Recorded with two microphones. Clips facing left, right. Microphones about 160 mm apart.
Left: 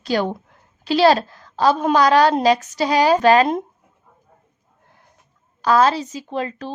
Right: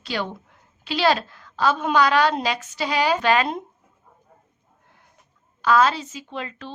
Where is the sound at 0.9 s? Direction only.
40° left (ahead or behind).